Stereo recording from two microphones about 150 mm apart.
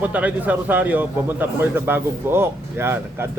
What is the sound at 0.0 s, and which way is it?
A man's voice, 10° right (ahead or behind).